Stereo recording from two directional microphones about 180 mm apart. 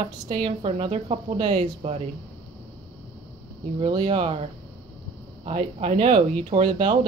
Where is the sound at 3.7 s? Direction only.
30° right (ahead or behind).